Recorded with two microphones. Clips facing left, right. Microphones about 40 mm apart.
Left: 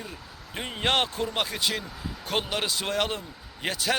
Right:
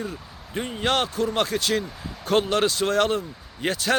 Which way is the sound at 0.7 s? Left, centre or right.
Left.